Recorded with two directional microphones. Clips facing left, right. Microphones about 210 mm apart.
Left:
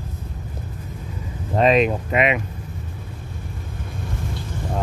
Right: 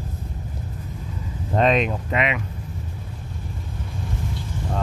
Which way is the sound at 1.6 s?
5° left (ahead or behind).